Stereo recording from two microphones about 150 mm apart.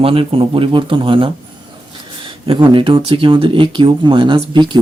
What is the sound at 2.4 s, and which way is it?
Speech, 35° right (ahead or behind).